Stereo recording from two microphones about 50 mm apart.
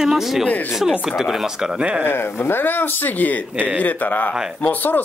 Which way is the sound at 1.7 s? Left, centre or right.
Right.